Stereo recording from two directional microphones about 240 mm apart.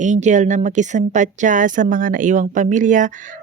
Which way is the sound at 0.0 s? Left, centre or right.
Right.